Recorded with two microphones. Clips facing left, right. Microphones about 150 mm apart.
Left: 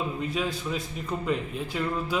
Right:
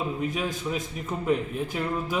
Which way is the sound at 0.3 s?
10° right (ahead or behind).